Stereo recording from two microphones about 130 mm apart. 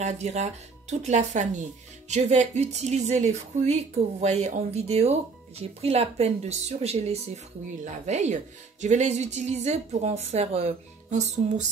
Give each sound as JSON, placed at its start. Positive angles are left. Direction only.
{"t": 0.0, "sound": "speech", "side_deg": -60}